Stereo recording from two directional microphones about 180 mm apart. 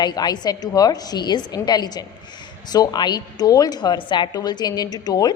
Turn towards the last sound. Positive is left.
turn(degrees=20)  # may be behind; listen again after turning